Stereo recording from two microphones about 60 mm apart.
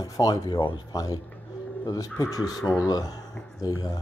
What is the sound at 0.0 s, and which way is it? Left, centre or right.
Speech, left.